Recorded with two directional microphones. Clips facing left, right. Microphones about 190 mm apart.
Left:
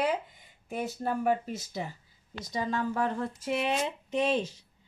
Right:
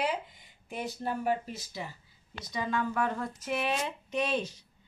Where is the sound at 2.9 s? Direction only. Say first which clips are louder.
Left 1 dB; 30° left (ahead or behind).